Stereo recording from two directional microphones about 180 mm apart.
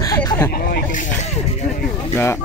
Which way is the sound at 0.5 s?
55° left (ahead or behind).